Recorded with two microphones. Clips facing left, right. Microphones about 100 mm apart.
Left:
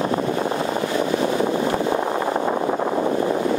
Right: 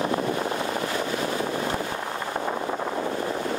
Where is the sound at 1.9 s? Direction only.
65° left (ahead or behind).